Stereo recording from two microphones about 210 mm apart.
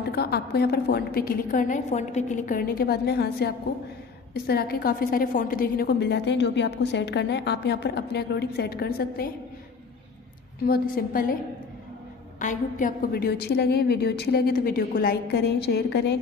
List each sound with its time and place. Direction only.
0.1 s a woman's voice: 50° left (ahead or behind)
10.6 s a woman's voice: 45° left (ahead or behind)
12.4 s a woman's voice: 40° left (ahead or behind)